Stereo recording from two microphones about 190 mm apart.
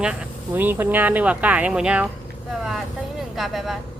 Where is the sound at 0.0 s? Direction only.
5° right (ahead or behind).